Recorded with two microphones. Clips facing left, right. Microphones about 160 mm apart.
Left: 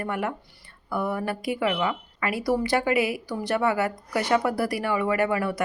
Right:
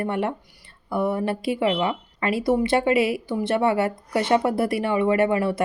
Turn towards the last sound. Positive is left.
turn(degrees=-25)  # may be behind; listen again after turning